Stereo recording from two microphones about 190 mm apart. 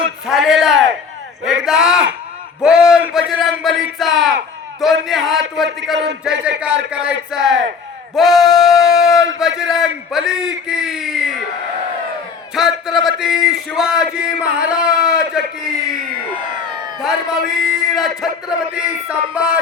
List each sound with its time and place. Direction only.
0.3 s speech: centre (ahead or behind)
12.5 s speech: centre (ahead or behind)
17.0 s speech: centre (ahead or behind)